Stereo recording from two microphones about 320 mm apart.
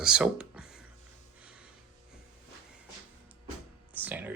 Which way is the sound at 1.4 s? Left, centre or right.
Centre.